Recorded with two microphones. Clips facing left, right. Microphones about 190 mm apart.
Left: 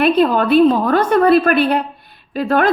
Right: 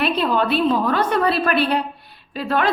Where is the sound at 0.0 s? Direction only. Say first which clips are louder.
Left 6 dB; 50° left (ahead or behind).